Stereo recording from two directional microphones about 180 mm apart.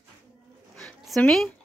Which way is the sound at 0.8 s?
Centre (ahead or behind).